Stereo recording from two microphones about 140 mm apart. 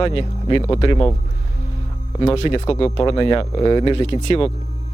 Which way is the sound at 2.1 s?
40° left (ahead or behind).